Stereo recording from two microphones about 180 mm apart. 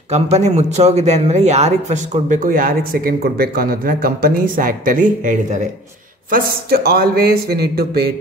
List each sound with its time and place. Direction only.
0.1 s a man's voice: 40° right (ahead or behind)
6.3 s speech: 60° right (ahead or behind)